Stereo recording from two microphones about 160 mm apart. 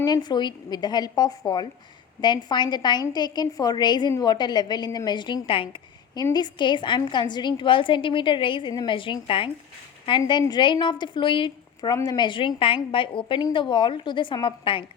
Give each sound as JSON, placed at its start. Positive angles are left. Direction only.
{"t": 0.0, "sound": "a woman's voice", "side_deg": 25}